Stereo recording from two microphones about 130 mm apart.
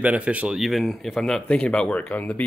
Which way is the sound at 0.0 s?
10° right (ahead or behind).